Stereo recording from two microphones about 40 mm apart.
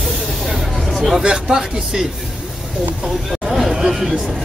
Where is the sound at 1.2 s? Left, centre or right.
Centre.